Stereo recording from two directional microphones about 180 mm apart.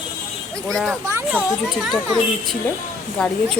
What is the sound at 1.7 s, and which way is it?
Speech, centre (ahead or behind).